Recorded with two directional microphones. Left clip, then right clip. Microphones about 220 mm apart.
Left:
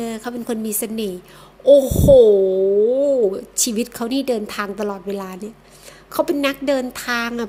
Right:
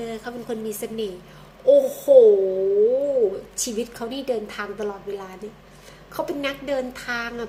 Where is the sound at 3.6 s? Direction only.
45° left (ahead or behind).